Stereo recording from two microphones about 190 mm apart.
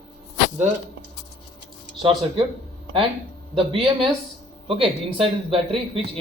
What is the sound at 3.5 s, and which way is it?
A man's voice, 30° right (ahead or behind).